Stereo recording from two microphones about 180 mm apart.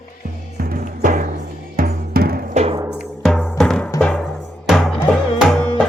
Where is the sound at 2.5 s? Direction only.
35° right (ahead or behind).